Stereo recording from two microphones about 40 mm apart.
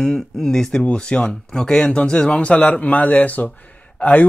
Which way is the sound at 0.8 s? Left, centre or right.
Left.